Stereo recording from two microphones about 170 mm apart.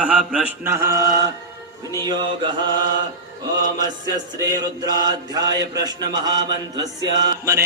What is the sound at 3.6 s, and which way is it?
Mantra, 25° right (ahead or behind).